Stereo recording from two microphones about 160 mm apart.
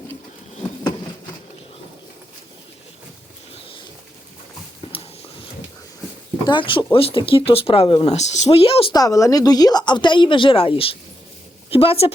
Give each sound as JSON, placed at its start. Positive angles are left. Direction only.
{"t": 3.5, "sound": "bird", "side_deg": 35}
{"t": 4.9, "sound": "a sound", "side_deg": 35}
{"t": 6.5, "sound": "speech", "side_deg": 30}
{"t": 8.9, "sound": "a woman's voice", "side_deg": 20}